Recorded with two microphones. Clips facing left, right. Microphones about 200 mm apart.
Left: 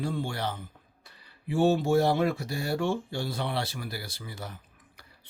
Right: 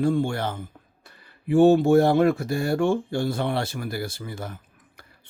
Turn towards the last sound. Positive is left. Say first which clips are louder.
# right 8 dB
turn(degrees=-50)  # may be behind; listen again after turning